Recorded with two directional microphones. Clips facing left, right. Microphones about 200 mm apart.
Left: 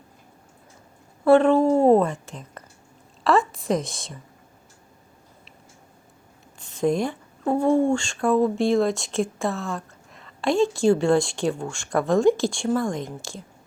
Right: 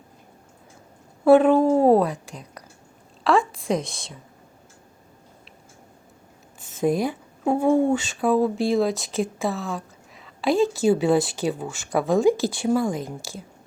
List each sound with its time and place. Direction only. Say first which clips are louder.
1.2 s a woman's voice: right 1 dB; 5° right (ahead or behind)
6.6 s speech: even; 5° right (ahead or behind)